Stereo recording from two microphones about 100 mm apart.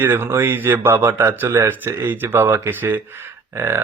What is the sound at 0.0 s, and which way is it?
Speech, 20° right (ahead or behind).